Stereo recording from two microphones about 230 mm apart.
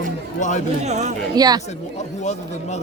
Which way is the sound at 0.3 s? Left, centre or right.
Left.